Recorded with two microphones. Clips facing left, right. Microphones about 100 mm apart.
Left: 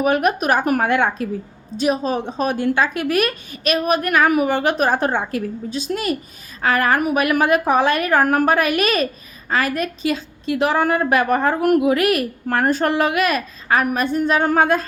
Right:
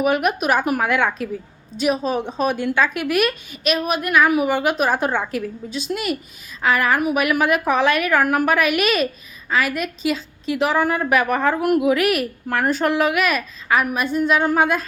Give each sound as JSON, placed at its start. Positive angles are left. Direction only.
{"t": 0.0, "sound": "a woman's voice", "side_deg": 40}
{"t": 0.9, "sound": "a woman's voice", "side_deg": 30}
{"t": 7.2, "sound": "a woman's voice", "side_deg": 35}
{"t": 11.8, "sound": "a woman's voice", "side_deg": 30}
{"t": 12.5, "sound": "a woman's voice", "side_deg": 40}
{"t": 13.7, "sound": "a woman's voice", "side_deg": 45}